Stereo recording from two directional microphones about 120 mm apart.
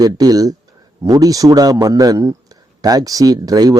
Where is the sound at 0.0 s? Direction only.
30° right (ahead or behind).